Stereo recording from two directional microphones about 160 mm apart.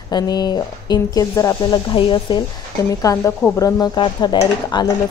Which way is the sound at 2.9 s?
20° left (ahead or behind).